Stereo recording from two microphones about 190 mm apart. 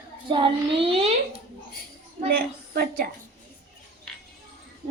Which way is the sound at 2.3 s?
50° right (ahead or behind).